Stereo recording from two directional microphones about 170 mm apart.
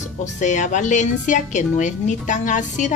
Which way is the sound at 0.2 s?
45° left (ahead or behind).